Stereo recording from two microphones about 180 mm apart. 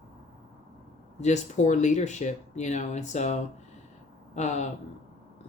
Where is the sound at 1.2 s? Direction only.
40° left (ahead or behind).